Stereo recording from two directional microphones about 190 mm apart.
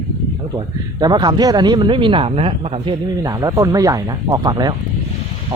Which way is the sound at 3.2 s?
15° right (ahead or behind).